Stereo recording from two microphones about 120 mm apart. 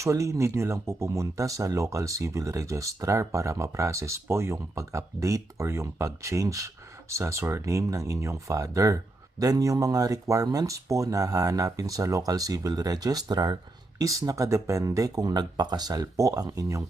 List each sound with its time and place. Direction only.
0.0 s speech: 25° right (ahead or behind)